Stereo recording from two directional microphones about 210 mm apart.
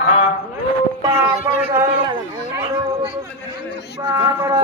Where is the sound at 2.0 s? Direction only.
20° right (ahead or behind).